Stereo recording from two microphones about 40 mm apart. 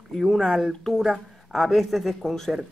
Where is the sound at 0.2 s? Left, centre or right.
Centre.